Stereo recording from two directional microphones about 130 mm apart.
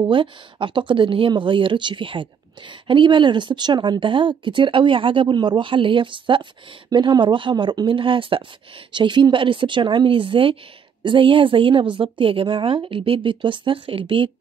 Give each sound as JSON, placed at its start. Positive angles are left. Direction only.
{"t": 0.0, "sound": "speech", "side_deg": -40}